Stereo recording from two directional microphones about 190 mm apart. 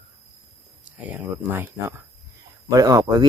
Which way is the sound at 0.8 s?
10° right (ahead or behind).